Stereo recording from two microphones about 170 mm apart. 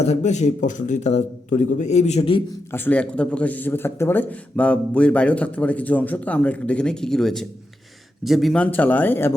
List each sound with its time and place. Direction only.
0.0 s a man's voice: 40° left (ahead or behind)
2.7 s speech: 10° left (ahead or behind)